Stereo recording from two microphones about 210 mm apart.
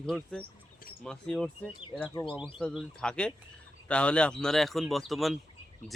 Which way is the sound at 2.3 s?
Centre (ahead or behind).